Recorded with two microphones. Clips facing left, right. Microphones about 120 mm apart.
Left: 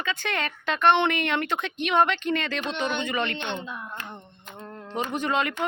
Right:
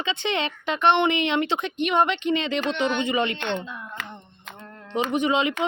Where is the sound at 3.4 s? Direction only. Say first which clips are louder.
Right 3 dB; 15° left (ahead or behind).